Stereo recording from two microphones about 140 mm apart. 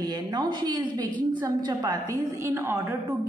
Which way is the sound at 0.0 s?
30° right (ahead or behind).